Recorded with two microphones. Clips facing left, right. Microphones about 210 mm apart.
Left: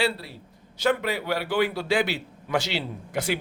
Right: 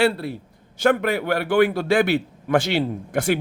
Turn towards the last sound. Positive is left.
turn(degrees=-50)  # may be behind; listen again after turning